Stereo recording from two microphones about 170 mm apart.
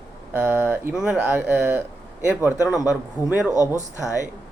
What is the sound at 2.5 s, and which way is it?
Speech, 20° left (ahead or behind).